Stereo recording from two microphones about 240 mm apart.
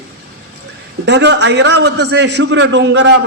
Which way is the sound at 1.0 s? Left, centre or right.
Right.